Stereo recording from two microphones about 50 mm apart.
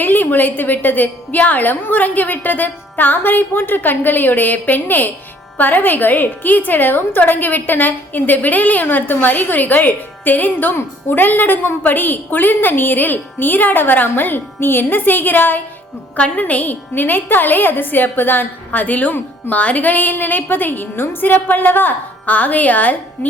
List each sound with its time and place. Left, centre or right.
0.0 s a woman's voice: left
16.1 s a woman's voice: left
16.4 s a woman's voice: left